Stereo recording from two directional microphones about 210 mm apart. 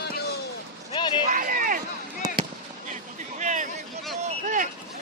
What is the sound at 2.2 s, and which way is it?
Fireworks, 20° right (ahead or behind).